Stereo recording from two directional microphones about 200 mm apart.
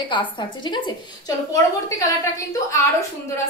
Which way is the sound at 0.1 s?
25° left (ahead or behind).